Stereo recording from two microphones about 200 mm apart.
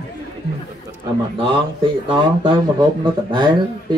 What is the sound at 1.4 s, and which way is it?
Speech, 25° right (ahead or behind).